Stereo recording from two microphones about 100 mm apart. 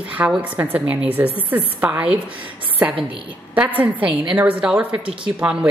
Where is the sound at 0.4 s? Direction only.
20° right (ahead or behind).